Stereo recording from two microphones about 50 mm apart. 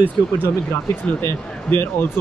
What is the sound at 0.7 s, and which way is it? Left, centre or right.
Speech, left.